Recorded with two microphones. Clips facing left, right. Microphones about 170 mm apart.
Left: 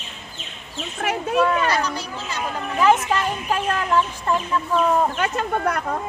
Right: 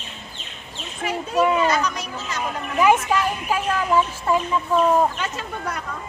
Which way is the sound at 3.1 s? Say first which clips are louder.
Right 1 dB; 10° right (ahead or behind).